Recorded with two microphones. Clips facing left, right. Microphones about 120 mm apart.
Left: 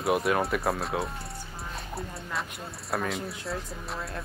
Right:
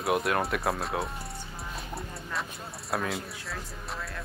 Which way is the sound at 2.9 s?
Centre (ahead or behind).